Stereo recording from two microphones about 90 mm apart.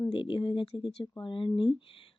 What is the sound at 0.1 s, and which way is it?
Speech, 70° left (ahead or behind).